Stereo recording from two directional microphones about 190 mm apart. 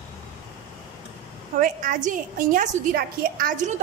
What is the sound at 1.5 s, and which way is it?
A woman's voice, 45° right (ahead or behind).